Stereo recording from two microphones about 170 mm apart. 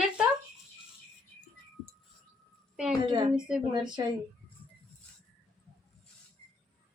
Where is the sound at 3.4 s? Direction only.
5° right (ahead or behind).